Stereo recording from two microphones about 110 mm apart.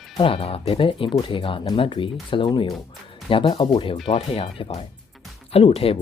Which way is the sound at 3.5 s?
50° left (ahead or behind).